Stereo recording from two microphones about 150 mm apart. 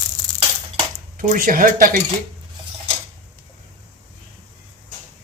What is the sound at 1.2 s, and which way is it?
Speech, 65° right (ahead or behind).